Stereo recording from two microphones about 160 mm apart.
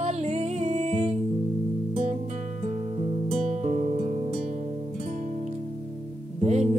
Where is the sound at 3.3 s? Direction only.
50° right (ahead or behind).